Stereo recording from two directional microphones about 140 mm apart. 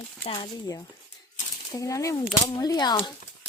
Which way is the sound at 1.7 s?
25° left (ahead or behind).